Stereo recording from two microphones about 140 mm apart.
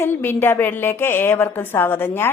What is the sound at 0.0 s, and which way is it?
A woman's voice, 15° left (ahead or behind).